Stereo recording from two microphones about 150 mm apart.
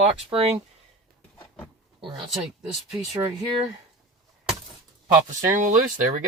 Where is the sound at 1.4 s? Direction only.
15° left (ahead or behind).